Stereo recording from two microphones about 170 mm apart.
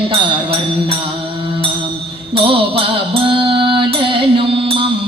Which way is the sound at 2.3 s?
30° right (ahead or behind).